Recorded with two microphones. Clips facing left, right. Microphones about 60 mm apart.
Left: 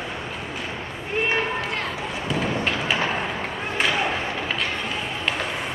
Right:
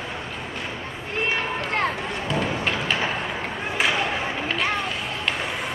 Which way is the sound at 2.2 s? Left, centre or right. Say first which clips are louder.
Left 1 dB; centre.